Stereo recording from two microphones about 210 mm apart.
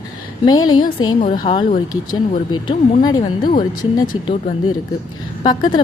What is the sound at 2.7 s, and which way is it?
Speech, 20° left (ahead or behind).